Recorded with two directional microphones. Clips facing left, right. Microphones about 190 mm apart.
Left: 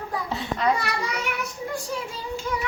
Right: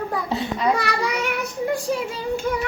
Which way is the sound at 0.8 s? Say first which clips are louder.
Right 5 dB; 70° right (ahead or behind).